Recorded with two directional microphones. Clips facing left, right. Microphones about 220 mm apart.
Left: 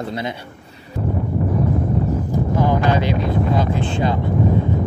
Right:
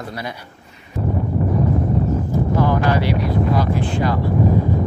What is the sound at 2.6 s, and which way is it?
Speech, 20° left (ahead or behind).